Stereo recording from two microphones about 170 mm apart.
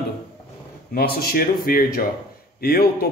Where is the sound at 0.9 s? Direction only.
60° left (ahead or behind).